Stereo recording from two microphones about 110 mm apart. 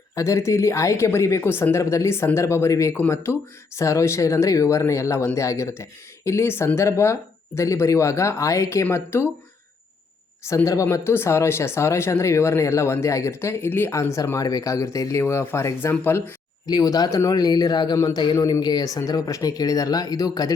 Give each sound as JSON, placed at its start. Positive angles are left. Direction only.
{"t": 0.1, "sound": "speech", "side_deg": 30}
{"t": 10.4, "sound": "speech", "side_deg": 25}
{"t": 16.6, "sound": "speech", "side_deg": 35}